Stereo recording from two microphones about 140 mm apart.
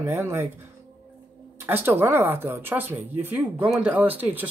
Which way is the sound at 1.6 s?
15° right (ahead or behind).